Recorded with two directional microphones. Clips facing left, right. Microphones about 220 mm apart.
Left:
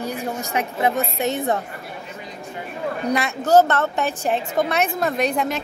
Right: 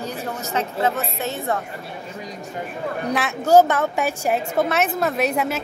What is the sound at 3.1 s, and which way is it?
A woman's voice, 5° right (ahead or behind).